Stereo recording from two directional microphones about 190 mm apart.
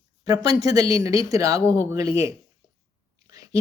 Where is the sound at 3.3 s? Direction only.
20° right (ahead or behind).